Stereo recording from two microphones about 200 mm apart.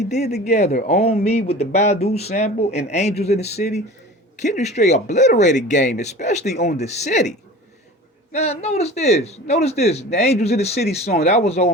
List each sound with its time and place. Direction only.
0.1 s speech: 35° left (ahead or behind)